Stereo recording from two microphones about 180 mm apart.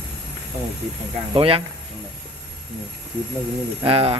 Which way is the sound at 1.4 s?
30° right (ahead or behind).